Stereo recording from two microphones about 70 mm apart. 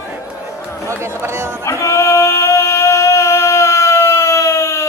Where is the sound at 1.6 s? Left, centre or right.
Left.